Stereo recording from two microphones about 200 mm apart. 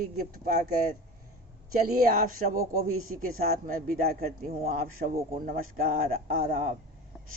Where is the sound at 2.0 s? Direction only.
45° right (ahead or behind).